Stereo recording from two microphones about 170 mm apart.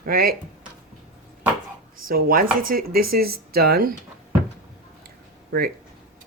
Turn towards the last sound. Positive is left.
turn(degrees=-65)  # may be behind; listen again after turning